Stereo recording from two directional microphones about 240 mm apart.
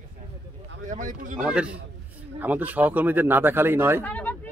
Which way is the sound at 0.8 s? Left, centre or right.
Right.